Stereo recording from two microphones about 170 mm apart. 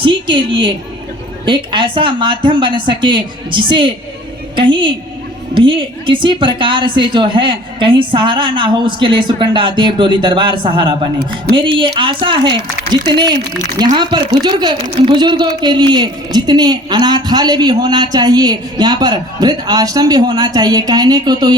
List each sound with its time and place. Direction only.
0.0 s a woman's voice: 30° right (ahead or behind)